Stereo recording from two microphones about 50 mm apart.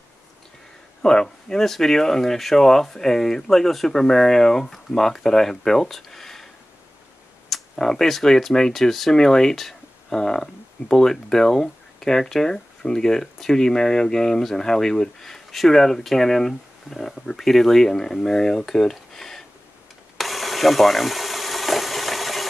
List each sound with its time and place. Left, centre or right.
1.0 s speech: centre
7.7 s speech: centre
20.2 s engine: centre